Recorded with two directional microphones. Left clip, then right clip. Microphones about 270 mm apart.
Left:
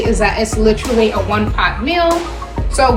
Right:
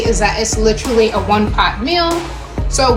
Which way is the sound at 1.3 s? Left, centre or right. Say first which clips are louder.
Right 2 dB; right.